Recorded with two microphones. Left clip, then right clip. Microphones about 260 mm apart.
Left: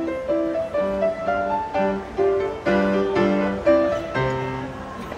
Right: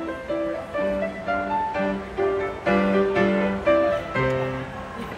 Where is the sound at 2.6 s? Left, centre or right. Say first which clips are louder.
Right 2 dB; left.